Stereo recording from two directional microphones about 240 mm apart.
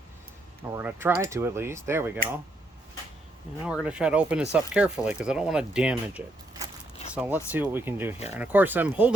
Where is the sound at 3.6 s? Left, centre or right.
Centre.